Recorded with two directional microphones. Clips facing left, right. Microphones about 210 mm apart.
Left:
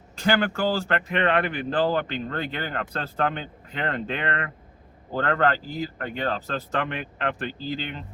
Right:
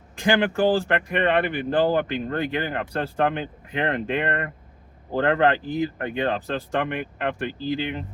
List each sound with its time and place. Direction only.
0.2 s speech: 15° right (ahead or behind)
5.3 s speech: 20° right (ahead or behind)